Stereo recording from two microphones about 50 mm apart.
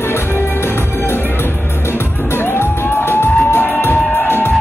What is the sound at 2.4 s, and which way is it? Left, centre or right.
Music, left.